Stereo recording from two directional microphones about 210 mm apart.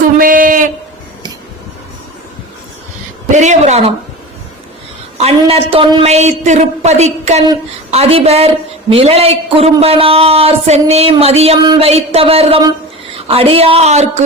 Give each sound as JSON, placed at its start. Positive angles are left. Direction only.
{"t": 0.2, "sound": "a sound", "side_deg": -40}
{"t": 3.3, "sound": "a woman's voice", "side_deg": -35}
{"t": 5.1, "sound": "a woman's voice", "side_deg": -30}